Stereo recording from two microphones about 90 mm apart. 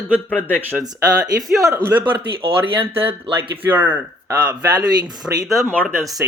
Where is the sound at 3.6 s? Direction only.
20° right (ahead or behind).